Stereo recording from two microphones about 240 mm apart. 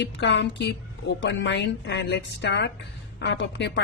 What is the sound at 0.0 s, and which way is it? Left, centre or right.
A woman's voice, left.